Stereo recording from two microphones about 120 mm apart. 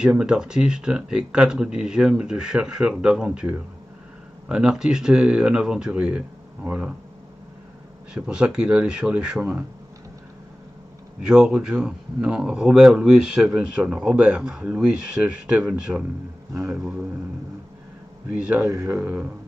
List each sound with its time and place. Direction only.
0.0 s speech: 5° right (ahead or behind)
4.5 s speech: 5° right (ahead or behind)
8.1 s speech: 10° right (ahead or behind)
11.2 s speech: 5° right (ahead or behind)
18.3 s speech: 10° right (ahead or behind)